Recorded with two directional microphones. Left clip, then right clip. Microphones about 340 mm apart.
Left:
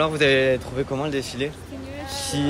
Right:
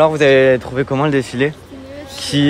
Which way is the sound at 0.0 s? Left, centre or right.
Centre.